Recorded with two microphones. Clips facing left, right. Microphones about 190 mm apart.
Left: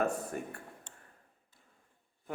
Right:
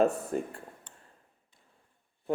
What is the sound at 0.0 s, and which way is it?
Speech, 30° right (ahead or behind).